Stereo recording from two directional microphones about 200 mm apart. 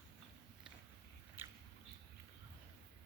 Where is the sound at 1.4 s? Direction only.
10° right (ahead or behind).